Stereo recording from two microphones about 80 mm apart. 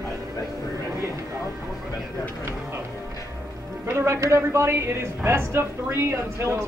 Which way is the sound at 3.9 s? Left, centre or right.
Right.